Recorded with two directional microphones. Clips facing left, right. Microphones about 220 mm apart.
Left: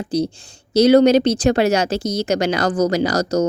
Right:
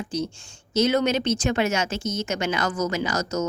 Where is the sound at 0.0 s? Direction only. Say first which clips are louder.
Left 8 dB; 35° left (ahead or behind).